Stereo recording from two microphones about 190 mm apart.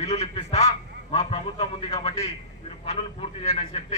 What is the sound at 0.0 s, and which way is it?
Radio, 35° left (ahead or behind).